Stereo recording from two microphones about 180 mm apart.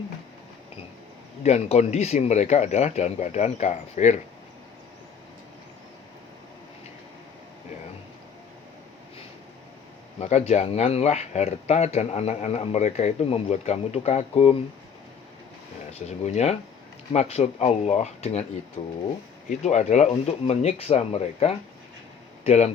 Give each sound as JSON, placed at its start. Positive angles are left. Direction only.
{"t": 1.5, "sound": "speech", "side_deg": 40}
{"t": 10.2, "sound": "speech", "side_deg": 40}
{"t": 15.9, "sound": "speech", "side_deg": 40}